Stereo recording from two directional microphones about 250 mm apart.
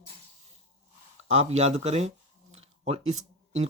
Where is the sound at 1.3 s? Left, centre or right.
Right.